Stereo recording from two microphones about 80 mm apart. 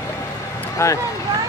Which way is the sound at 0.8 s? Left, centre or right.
Left.